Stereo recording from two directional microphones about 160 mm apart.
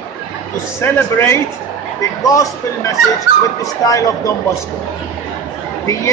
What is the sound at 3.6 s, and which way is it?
Speech, 20° left (ahead or behind).